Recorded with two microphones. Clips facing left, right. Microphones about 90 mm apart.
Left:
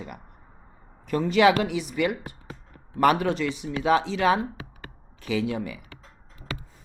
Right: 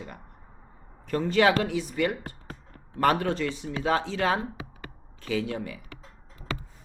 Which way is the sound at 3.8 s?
90° left.